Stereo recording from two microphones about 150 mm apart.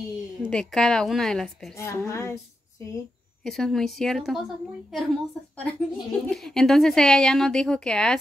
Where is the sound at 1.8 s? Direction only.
20° left (ahead or behind).